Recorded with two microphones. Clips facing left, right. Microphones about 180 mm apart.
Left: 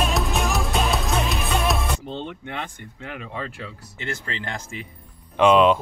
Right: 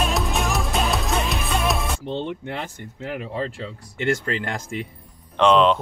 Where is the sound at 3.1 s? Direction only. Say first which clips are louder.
Right 5 dB; 35° right (ahead or behind).